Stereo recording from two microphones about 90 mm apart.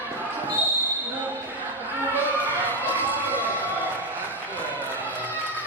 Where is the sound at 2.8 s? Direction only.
20° right (ahead or behind).